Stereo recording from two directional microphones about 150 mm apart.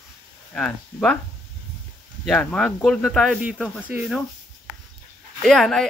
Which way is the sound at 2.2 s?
5° left (ahead or behind).